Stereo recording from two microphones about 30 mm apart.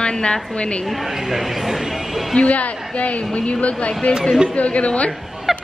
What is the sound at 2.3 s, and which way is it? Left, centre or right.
A woman's voice, left.